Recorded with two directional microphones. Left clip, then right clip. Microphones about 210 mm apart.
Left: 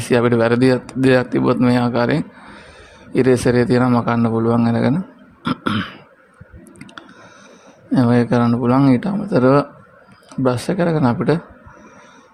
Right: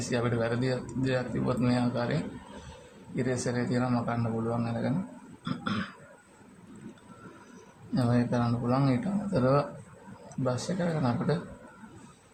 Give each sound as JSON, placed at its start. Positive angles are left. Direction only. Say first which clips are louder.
{"t": 0.1, "sound": "speech", "louder": "left 16 dB", "side_deg": 50}
{"t": 3.2, "sound": "speech", "louder": "left 17 dB", "side_deg": 50}
{"t": 5.4, "sound": "cough", "louder": "left 13 dB", "side_deg": 40}
{"t": 7.9, "sound": "speech", "louder": "left 13 dB", "side_deg": 45}